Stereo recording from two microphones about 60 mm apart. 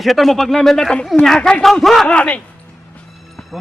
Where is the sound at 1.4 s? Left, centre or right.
Left.